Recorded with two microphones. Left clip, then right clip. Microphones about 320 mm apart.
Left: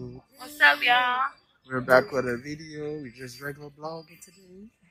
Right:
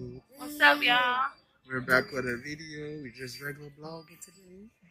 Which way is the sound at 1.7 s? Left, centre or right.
Centre.